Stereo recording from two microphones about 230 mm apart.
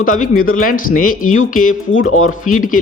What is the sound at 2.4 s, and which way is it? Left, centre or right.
Speech, left.